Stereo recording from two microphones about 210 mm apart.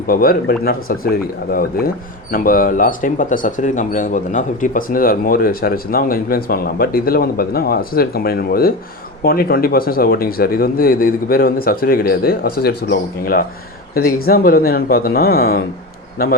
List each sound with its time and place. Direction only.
0.1 s speech: 45° left (ahead or behind)